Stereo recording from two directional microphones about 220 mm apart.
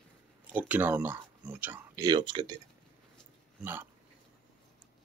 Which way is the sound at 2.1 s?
20° right (ahead or behind).